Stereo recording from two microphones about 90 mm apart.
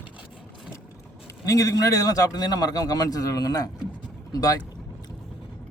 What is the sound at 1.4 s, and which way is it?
A man's voice, 40° left (ahead or behind).